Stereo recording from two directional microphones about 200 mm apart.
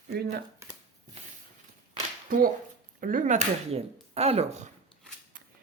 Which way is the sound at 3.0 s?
45° right (ahead or behind).